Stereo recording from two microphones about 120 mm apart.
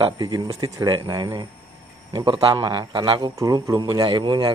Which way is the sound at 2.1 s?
45° right (ahead or behind).